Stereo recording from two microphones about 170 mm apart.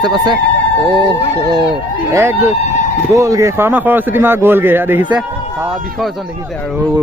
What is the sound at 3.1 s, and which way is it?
A man's voice, 15° right (ahead or behind).